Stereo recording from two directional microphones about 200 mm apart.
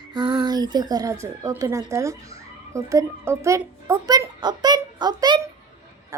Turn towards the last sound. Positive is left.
turn(degrees=-20)  # may be behind; listen again after turning